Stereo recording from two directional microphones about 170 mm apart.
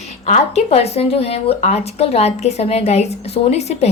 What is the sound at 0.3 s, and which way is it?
Speech, 40° left (ahead or behind).